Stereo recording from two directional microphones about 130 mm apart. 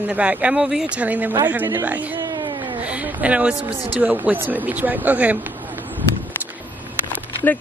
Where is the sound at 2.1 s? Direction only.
30° right (ahead or behind).